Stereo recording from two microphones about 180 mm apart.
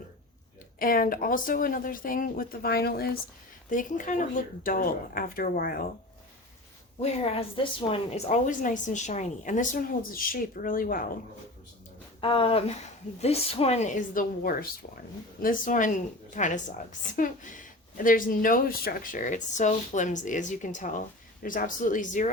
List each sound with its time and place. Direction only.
0.8 s a woman's voice: 50° left (ahead or behind)
3.7 s a woman's voice: 45° left (ahead or behind)
7.0 s a woman's voice: 35° left (ahead or behind); by 11.0 s 50° left (ahead or behind)
12.2 s a woman's voice: 30° left (ahead or behind); by 22.3 s 45° left (ahead or behind)